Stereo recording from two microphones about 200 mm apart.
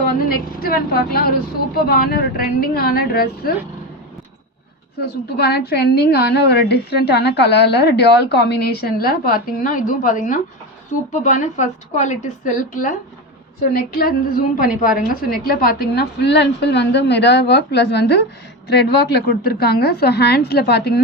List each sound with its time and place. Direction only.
0.0 s a woman's voice: 50° left (ahead or behind)
4.9 s a woman's voice: 55° left (ahead or behind)